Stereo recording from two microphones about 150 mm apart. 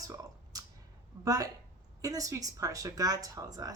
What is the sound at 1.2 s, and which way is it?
Speech, 25° right (ahead or behind).